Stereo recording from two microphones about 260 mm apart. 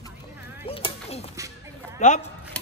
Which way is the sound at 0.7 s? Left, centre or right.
Left.